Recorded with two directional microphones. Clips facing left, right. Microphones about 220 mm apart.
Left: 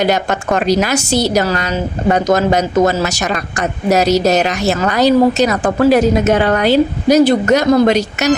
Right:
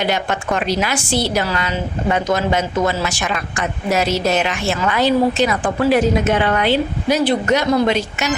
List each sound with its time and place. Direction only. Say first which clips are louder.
0.0 s a woman's voice: left 5 dB; 40° left (ahead or behind)